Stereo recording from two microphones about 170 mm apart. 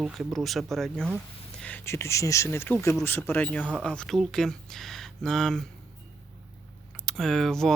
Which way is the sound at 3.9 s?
5° left (ahead or behind).